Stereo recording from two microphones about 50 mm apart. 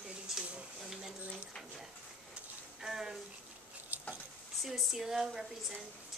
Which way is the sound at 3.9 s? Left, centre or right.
Right.